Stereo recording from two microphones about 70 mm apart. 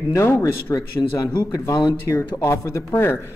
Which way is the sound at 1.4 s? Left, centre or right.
Left.